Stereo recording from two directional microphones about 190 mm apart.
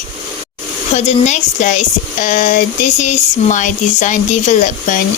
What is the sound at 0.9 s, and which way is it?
Speech, 35° left (ahead or behind).